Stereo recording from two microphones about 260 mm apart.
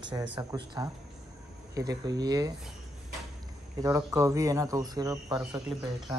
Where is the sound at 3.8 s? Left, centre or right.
Centre.